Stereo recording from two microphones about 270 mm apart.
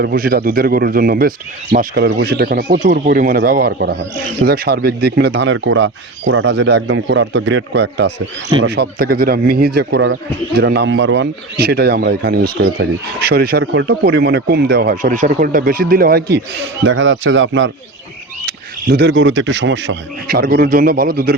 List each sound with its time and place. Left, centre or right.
0.0 s speech: right